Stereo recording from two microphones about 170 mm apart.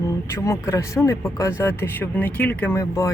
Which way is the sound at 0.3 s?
15° left (ahead or behind).